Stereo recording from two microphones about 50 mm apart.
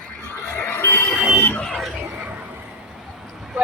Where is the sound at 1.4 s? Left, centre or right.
Left.